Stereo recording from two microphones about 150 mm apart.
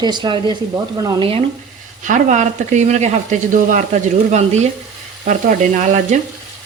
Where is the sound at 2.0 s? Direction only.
55° right (ahead or behind).